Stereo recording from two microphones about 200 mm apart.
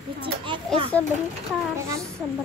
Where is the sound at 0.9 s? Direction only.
5° left (ahead or behind).